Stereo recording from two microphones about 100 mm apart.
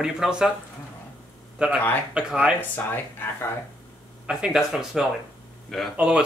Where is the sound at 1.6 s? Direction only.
10° right (ahead or behind).